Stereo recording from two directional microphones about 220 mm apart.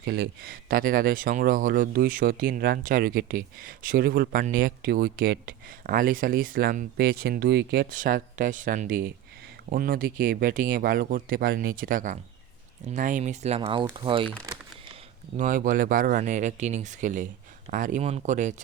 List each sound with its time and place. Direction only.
0.0 s speech: 45° right (ahead or behind); by 14.3 s 20° right (ahead or behind)
15.4 s speech: 35° right (ahead or behind)